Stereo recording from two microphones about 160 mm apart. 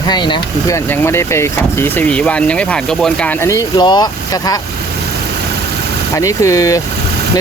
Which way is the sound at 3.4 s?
25° left (ahead or behind).